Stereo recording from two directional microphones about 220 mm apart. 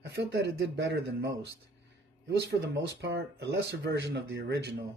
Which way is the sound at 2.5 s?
50° right (ahead or behind).